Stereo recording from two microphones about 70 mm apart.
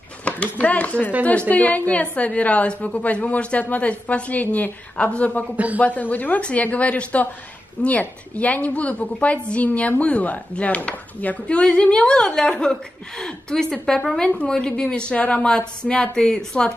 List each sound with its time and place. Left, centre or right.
0.2 s a woman's voice: centre
14.2 s a woman's voice: centre